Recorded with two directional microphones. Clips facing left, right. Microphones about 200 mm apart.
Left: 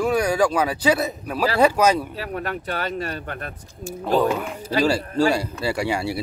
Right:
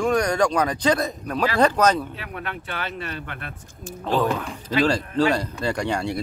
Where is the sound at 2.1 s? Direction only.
40° left (ahead or behind).